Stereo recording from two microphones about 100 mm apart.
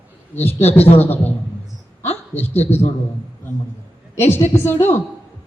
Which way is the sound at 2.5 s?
20° left (ahead or behind).